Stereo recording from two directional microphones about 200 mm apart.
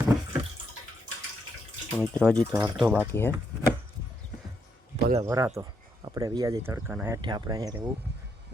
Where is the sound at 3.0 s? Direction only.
10° left (ahead or behind).